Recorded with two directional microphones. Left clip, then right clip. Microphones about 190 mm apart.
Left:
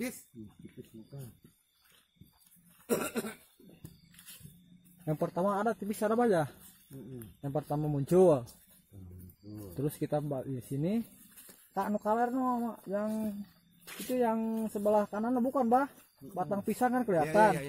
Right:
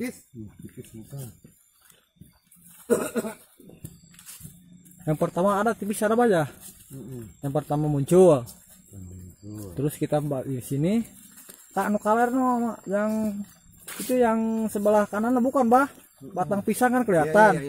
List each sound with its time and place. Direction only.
2.9 s cough: 15° left (ahead or behind)
5.0 s speech: 10° right (ahead or behind)
9.8 s speech: 5° right (ahead or behind)